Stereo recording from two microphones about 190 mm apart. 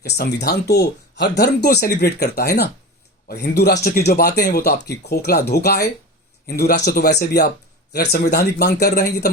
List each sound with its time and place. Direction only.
0.0 s speech: 60° left (ahead or behind)